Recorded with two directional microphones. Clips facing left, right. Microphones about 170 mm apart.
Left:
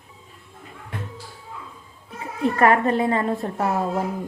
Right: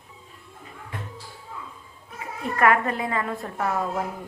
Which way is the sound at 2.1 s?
30° left (ahead or behind).